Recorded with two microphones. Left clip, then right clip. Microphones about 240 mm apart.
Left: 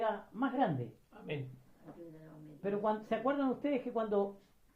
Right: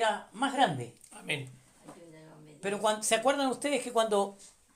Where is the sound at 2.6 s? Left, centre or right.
Right.